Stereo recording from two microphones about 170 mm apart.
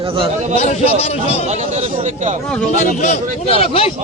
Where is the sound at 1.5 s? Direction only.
40° right (ahead or behind).